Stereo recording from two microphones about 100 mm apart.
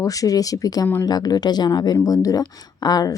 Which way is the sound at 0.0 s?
35° left (ahead or behind).